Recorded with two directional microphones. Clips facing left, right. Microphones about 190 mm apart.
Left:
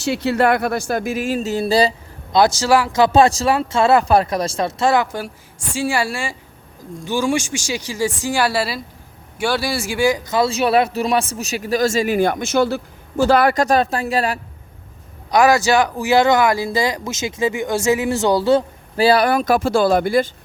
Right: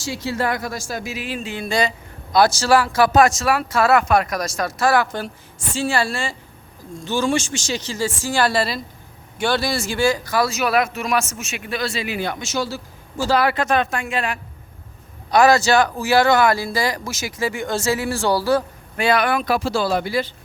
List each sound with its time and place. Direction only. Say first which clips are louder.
0.0 s speech: left 7 dB; 65° left (ahead or behind); by 1.9 s 35° left (ahead or behind)
2.3 s speech: left 1 dB; 20° left (ahead or behind)
5.1 s speech: left 1 dB; 10° left (ahead or behind); by 14.3 s 40° left (ahead or behind)
15.3 s speech: even; 15° left (ahead or behind); by 20.3 s 50° left (ahead or behind)